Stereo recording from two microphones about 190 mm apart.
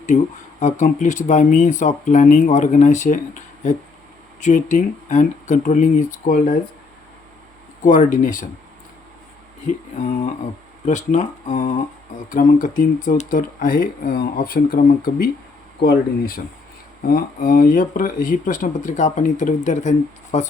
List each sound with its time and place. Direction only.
0.1 s speech: 40° left (ahead or behind)
4.4 s speech: 40° left (ahead or behind)
7.9 s speech: 45° left (ahead or behind)
9.6 s speech: 40° left (ahead or behind)